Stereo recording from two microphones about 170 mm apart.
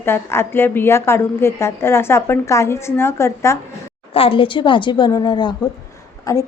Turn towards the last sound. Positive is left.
turn(degrees=20)  # may be behind; listen again after turning